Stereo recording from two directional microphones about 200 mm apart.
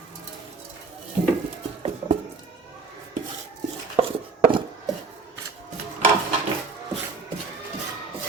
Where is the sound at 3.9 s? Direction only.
25° right (ahead or behind).